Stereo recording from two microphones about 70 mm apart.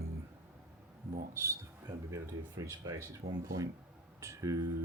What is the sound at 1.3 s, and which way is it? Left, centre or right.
Speech, right.